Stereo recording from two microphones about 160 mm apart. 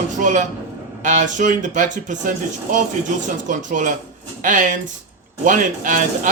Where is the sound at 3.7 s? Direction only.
55° right (ahead or behind).